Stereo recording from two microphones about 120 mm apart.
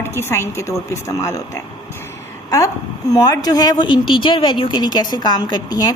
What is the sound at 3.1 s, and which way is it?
Speech, 30° left (ahead or behind).